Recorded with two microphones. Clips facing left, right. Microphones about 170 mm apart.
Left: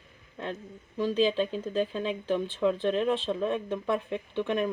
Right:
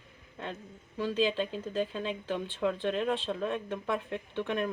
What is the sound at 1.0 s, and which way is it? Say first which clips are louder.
Speech: left 4 dB; 15° left (ahead or behind).